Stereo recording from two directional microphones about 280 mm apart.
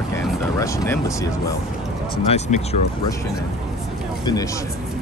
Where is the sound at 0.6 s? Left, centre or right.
Centre.